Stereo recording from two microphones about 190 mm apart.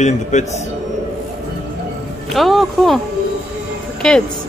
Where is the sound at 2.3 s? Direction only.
Centre (ahead or behind).